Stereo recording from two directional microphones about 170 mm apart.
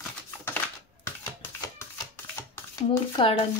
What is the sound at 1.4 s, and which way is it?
Shuffling cards, 15° left (ahead or behind).